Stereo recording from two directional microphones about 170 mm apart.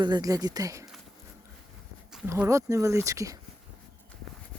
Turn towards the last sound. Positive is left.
turn(degrees=-20)  # may be behind; listen again after turning